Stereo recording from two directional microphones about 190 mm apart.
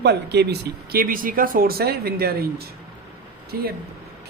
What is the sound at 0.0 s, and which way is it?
Speech, 60° right (ahead or behind).